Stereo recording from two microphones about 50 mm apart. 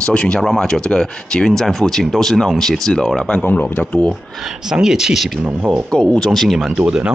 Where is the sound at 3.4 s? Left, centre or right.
Left.